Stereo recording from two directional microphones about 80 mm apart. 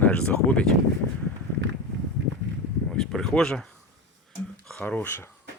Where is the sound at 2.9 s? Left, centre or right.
Centre.